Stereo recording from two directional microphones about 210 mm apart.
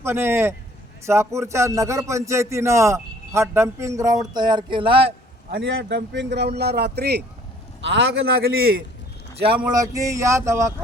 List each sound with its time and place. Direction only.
0.0 s a man's voice: 10° right (ahead or behind)
5.5 s a man's voice: 50° right (ahead or behind)
9.7 s a man's voice: 15° right (ahead or behind)